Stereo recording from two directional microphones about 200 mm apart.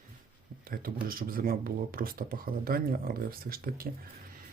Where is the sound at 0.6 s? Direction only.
45° right (ahead or behind).